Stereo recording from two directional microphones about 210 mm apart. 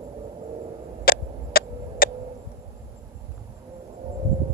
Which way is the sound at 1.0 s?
45° left (ahead or behind).